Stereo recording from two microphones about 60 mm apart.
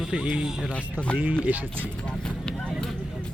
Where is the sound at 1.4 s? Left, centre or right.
Right.